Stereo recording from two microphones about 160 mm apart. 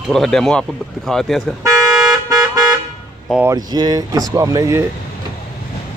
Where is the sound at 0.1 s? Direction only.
5° left (ahead or behind).